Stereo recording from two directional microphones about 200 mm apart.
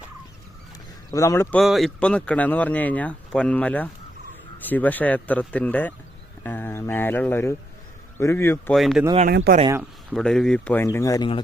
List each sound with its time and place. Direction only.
1.1 s speech: 15° left (ahead or behind)
1.5 s speech: centre (ahead or behind)
8.7 s speech: centre (ahead or behind)
9.3 s speech: 55° right (ahead or behind)
10.1 s speech: centre (ahead or behind)